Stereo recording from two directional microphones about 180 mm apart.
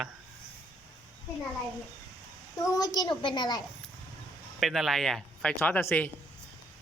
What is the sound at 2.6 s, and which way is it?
Speech, 20° left (ahead or behind).